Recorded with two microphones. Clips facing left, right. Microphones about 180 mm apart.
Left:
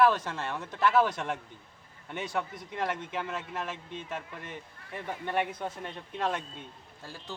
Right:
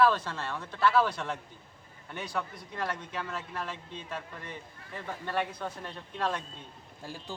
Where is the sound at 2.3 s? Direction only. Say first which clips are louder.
Left 2 dB; 20° left (ahead or behind).